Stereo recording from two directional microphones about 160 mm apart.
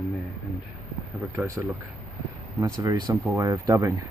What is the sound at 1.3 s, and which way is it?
Speech, 15° right (ahead or behind).